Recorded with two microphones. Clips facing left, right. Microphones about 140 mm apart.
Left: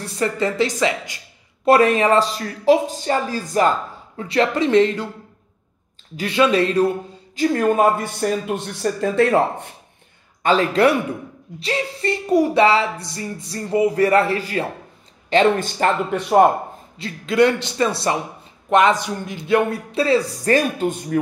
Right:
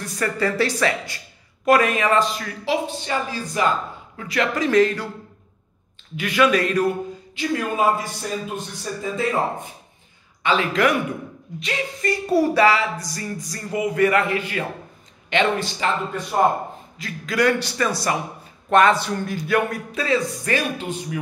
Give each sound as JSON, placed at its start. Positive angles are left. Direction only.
{"t": 0.0, "sound": "a man's voice", "side_deg": 25}
{"t": 1.7, "sound": "speech", "side_deg": 30}
{"t": 4.2, "sound": "a man's voice", "side_deg": 30}
{"t": 6.1, "sound": "a man's voice", "side_deg": 30}
{"t": 7.3, "sound": "speech", "side_deg": 50}
{"t": 10.4, "sound": "speech", "side_deg": 40}
{"t": 12.3, "sound": "a sound", "side_deg": 15}
{"t": 12.6, "sound": "a man's voice", "side_deg": 30}
{"t": 15.8, "sound": "speech", "side_deg": 50}
{"t": 17.0, "sound": "a man's voice", "side_deg": 25}